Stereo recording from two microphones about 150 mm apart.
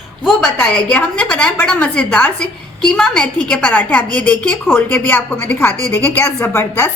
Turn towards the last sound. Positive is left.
turn(degrees=20)  # may be behind; listen again after turning